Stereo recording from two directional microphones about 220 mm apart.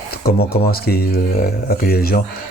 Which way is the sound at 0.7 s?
45° left (ahead or behind).